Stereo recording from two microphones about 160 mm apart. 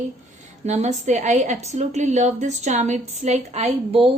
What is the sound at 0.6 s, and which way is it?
A woman's voice, 45° right (ahead or behind).